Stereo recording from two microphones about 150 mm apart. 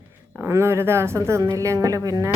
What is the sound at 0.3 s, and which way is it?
Speech, 20° right (ahead or behind).